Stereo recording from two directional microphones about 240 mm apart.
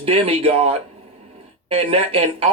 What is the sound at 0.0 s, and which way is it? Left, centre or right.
A man's voice, right.